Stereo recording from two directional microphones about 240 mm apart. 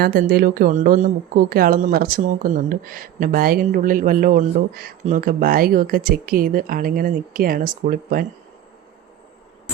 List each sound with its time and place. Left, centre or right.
0.0 s speech: right